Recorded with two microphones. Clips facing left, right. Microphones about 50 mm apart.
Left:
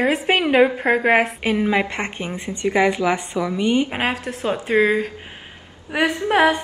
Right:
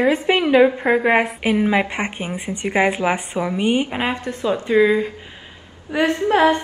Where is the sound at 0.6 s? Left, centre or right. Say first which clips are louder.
Right 1 dB; centre.